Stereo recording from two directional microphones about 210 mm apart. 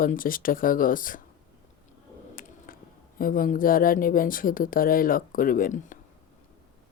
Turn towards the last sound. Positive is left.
turn(degrees=40)  # may be behind; listen again after turning